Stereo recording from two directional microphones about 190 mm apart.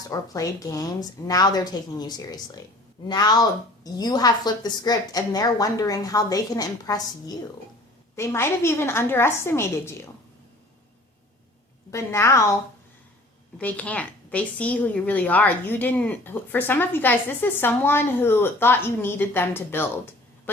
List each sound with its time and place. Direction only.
0.1 s a woman's voice: 15° left (ahead or behind)
11.9 s a woman's voice: 15° left (ahead or behind)
13.6 s a woman's voice: 10° left (ahead or behind)